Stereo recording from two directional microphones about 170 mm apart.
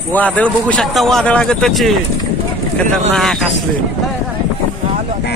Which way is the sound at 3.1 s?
Centre (ahead or behind).